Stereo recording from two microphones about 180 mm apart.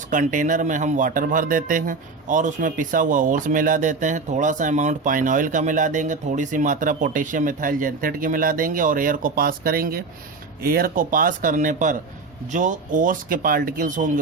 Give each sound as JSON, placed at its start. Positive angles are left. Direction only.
{"t": 0.1, "sound": "a man's voice", "side_deg": -45}